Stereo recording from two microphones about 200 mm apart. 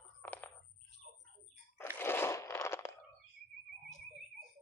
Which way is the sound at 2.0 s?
10° left (ahead or behind).